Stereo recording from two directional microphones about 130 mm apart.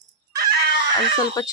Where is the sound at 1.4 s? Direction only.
30° left (ahead or behind).